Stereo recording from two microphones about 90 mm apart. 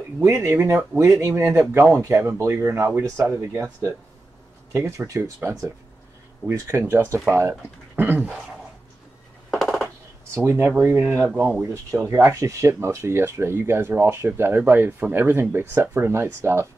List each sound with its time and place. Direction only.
0.2 s speech: 35° right (ahead or behind)
9.5 s a sound: centre (ahead or behind)
10.3 s speech: 30° right (ahead or behind)